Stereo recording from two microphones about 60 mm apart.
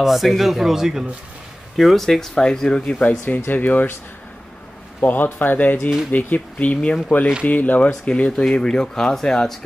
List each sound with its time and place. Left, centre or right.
0.0 s speech: centre
3.0 s speech: left
5.0 s speech: left; by 9.6 s centre